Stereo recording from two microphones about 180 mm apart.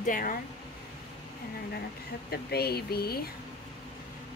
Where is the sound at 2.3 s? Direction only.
60° left (ahead or behind).